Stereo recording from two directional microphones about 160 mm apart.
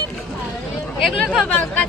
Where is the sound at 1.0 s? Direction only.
Centre (ahead or behind).